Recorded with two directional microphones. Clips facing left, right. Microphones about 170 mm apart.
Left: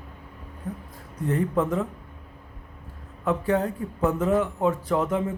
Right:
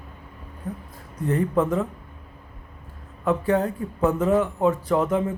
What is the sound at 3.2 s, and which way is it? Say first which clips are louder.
Speech: right 2 dB; 45° right (ahead or behind).